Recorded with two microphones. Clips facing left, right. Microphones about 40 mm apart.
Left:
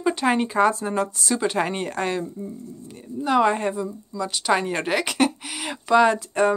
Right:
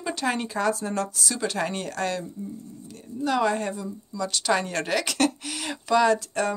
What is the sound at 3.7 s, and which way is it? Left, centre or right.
Speech, centre.